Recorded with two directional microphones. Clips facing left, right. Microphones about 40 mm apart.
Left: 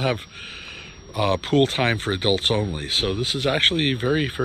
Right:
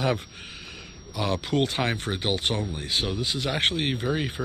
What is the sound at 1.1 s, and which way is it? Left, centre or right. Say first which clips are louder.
Speech: left 6 dB; left.